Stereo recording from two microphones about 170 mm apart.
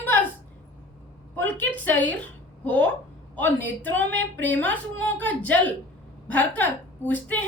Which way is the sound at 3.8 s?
90° right.